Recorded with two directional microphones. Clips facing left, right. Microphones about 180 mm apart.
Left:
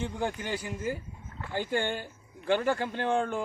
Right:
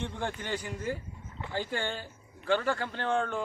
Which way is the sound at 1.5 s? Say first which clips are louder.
Left 4 dB; 15° left (ahead or behind).